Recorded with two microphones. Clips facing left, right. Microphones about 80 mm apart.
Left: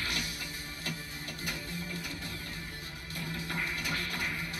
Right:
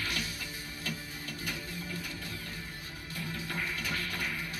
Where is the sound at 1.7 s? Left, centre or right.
Left.